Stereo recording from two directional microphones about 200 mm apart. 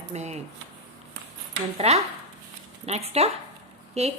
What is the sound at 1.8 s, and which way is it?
A woman's voice, 30° right (ahead or behind).